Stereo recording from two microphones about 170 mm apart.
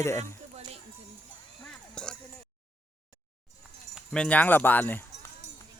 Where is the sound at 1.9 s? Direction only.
5° left (ahead or behind).